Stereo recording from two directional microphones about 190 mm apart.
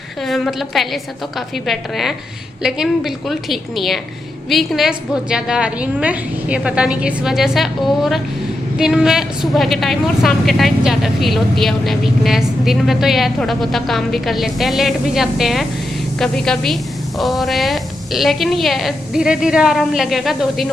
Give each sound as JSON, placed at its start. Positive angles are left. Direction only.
{"t": 0.2, "sound": "a woman's voice", "side_deg": 0}